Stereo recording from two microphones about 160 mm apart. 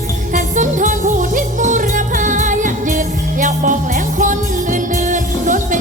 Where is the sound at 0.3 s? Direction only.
55° right (ahead or behind).